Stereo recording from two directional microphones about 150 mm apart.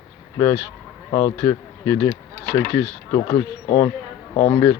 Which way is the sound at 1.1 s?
25° left (ahead or behind).